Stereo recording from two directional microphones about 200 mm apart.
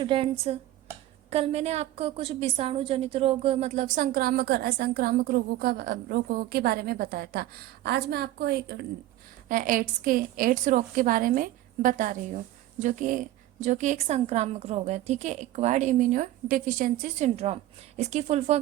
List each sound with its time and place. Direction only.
0.0 s a woman's voice: 25° right (ahead or behind); by 8.9 s 55° right (ahead or behind)
9.5 s a woman's voice: 45° right (ahead or behind)